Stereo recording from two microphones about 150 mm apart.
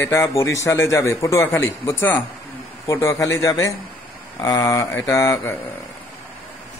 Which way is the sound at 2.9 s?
20° left (ahead or behind).